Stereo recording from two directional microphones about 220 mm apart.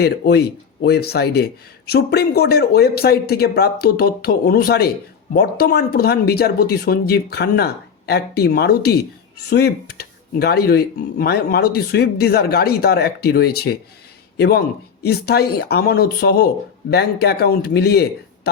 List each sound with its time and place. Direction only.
0.0 s a man's voice: 45° left (ahead or behind)